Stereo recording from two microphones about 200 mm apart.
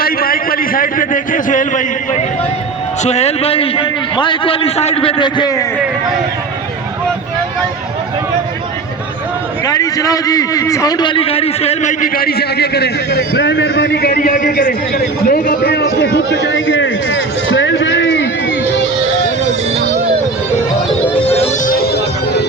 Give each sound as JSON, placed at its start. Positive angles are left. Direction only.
{"t": 0.0, "sound": "a sound", "side_deg": 45}
{"t": 3.0, "sound": "a man's voice", "side_deg": 35}
{"t": 9.6, "sound": "a man's voice", "side_deg": 20}
{"t": 21.3, "sound": "music", "side_deg": 30}
{"t": 21.7, "sound": "music", "side_deg": 50}